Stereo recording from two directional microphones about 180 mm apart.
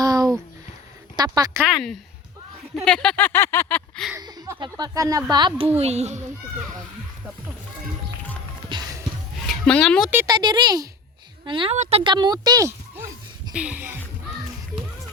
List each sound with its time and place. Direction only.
0.0 s a sound: 20° right (ahead or behind)
1.1 s a woman's voice: 20° right (ahead or behind)
1.6 s a woman's voice: centre (ahead or behind)
4.2 s speech: 20° right (ahead or behind); by 6.2 s 40° right (ahead or behind)
8.7 s a sound: 25° right (ahead or behind)
9.5 s a woman's voice: 5° left (ahead or behind)
10.2 s speech: 25° right (ahead or behind)
13.5 s speech: 5° right (ahead or behind)